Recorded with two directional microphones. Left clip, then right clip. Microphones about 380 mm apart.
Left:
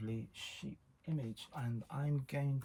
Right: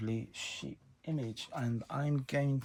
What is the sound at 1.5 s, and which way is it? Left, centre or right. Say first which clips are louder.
Speech: right 9 dB; centre.